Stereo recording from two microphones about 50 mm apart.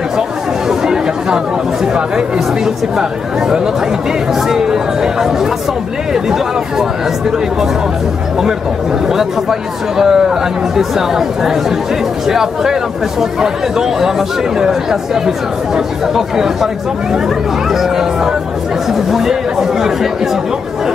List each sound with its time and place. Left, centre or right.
0.7 s chatter: centre
2.0 s speech: centre
9.0 s speech: centre
17.6 s speech: centre